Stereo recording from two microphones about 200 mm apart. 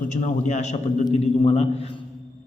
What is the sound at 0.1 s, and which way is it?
A man's voice, 35° left (ahead or behind).